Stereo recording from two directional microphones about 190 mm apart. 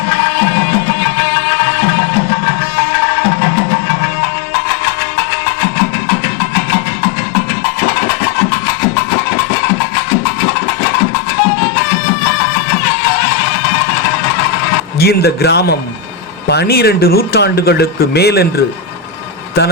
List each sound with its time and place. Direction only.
14.9 s speech: 55° left (ahead or behind)